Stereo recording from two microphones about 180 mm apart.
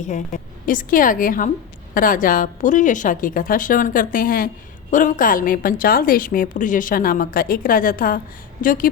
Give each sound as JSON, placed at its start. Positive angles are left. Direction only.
{"t": 0.0, "sound": "a woman's voice", "side_deg": 45}